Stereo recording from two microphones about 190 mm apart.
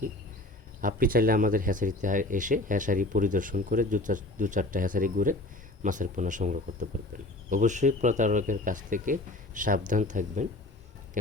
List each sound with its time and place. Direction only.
0.8 s speech: 45° right (ahead or behind)